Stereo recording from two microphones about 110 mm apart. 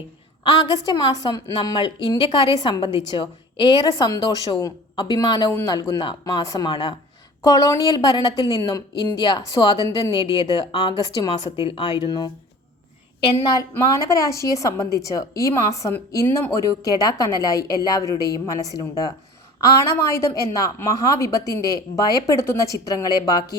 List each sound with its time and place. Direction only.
0.6 s a woman's voice: 40° left (ahead or behind)
3.7 s a woman's voice: 40° left (ahead or behind)
6.4 s a woman's voice: 30° left (ahead or behind)
6.7 s a woman's voice: 45° left (ahead or behind)
7.4 s a woman's voice: 35° left (ahead or behind)
13.4 s a woman's voice: 35° left (ahead or behind)